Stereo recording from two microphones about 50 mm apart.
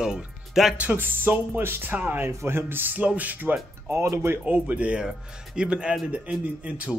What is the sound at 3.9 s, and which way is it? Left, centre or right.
Speech, right.